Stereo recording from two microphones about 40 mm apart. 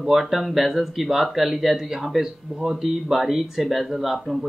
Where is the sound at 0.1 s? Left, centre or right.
Centre.